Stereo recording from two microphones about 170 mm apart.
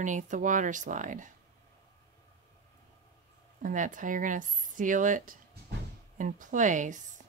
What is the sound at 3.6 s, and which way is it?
Speech, 50° right (ahead or behind).